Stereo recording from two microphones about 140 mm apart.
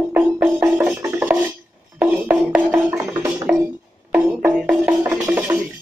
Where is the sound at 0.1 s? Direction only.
10° right (ahead or behind).